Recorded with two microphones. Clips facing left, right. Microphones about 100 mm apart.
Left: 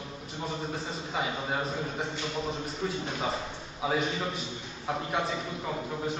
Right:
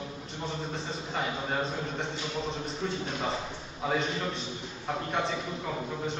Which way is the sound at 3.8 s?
5° left (ahead or behind).